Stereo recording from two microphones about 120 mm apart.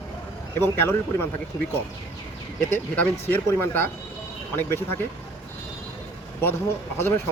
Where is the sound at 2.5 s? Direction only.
15° left (ahead or behind).